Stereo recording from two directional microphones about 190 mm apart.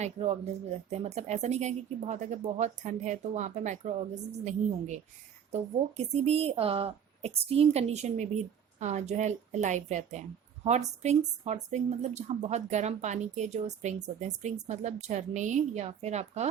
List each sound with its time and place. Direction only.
0.0 s a woman's voice: 35° right (ahead or behind)
6.1 s a woman's voice: 30° right (ahead or behind)